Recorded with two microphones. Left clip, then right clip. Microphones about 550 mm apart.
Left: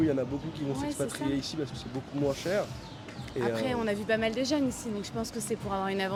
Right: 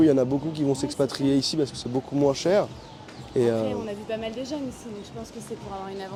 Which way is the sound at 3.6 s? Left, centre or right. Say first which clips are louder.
Right 1 dB; left.